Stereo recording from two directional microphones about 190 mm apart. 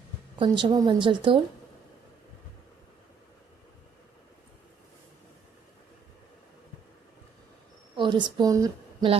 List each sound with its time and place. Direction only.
0.3 s speech: 25° right (ahead or behind)
7.9 s a woman's voice: 25° right (ahead or behind)